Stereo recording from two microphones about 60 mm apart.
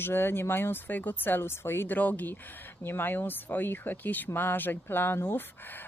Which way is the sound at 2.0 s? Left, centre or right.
Left.